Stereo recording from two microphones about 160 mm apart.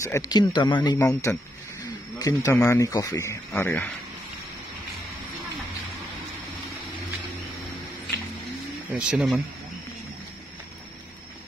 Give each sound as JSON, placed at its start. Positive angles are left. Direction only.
{"t": 0.0, "sound": "speech", "side_deg": 20}
{"t": 0.9, "sound": "speech", "side_deg": 15}
{"t": 8.9, "sound": "speech", "side_deg": -5}